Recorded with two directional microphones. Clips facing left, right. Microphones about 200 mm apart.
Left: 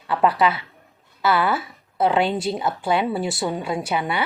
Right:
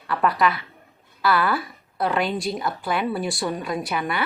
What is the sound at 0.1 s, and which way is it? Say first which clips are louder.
A woman's voice: left 2 dB; 25° left (ahead or behind).